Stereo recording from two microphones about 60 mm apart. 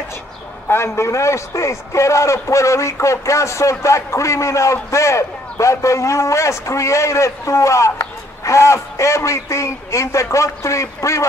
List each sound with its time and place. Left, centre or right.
0.7 s a man's voice: left